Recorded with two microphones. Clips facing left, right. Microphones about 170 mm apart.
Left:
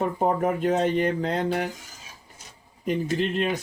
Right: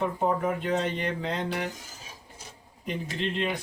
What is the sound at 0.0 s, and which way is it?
Speech, 45° left (ahead or behind).